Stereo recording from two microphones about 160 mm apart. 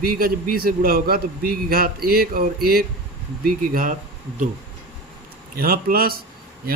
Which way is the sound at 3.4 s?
60° right (ahead or behind).